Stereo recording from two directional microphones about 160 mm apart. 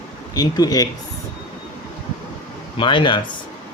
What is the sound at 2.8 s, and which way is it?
Speech, 30° left (ahead or behind).